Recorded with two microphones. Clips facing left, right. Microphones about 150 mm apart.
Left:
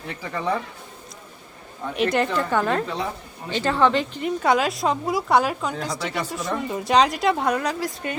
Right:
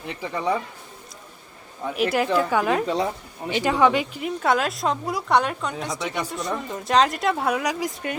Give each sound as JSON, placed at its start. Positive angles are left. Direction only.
{"t": 0.1, "sound": "a woman's voice", "side_deg": -15}
{"t": 2.0, "sound": "a woman's voice", "side_deg": -5}